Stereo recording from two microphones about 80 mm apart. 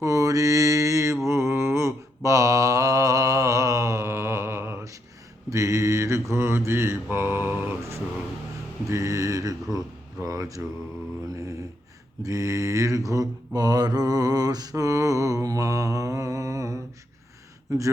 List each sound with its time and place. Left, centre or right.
0.0 s mantra: right
10.2 s speech: right
12.2 s mantra: right
17.7 s a sound: right